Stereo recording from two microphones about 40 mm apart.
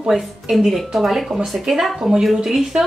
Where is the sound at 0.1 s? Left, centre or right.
Centre.